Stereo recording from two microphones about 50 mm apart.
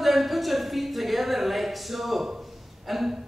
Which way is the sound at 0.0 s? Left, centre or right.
Centre.